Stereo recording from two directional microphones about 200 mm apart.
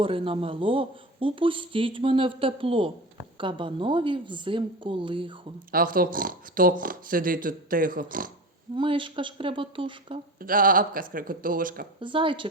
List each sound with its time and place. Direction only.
0.0 s speech: 25° right (ahead or behind)
5.7 s speech: 45° right (ahead or behind)
8.7 s speech: 25° right (ahead or behind)
10.4 s speech: 45° right (ahead or behind)
11.9 s speech: 25° right (ahead or behind)